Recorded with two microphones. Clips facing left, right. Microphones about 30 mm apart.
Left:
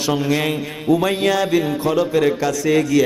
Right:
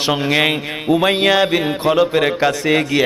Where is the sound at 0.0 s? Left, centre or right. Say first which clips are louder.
Right 3 dB; right.